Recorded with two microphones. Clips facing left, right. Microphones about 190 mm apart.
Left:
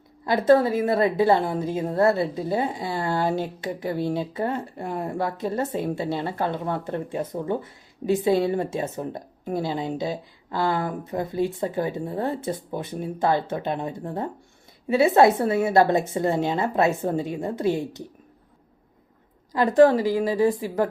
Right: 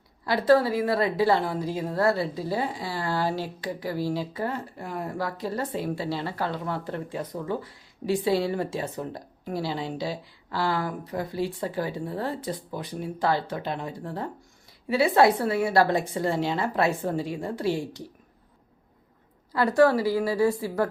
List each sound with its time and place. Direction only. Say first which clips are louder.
0.3 s a woman's voice: left 3 dB; 20° left (ahead or behind)
19.5 s a woman's voice: left 4 dB; 20° left (ahead or behind)